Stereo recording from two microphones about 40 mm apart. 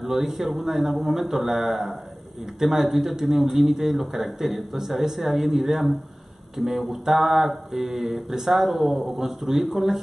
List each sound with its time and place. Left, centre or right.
0.0 s mantra: centre